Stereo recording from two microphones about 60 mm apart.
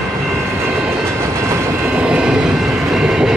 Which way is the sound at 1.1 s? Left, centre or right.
Right.